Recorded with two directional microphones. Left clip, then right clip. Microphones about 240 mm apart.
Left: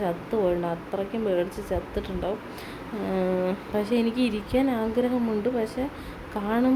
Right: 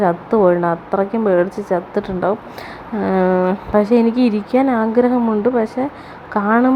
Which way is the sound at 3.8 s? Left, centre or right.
Centre.